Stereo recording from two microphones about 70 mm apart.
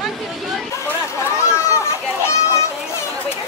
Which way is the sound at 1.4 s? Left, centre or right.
Left.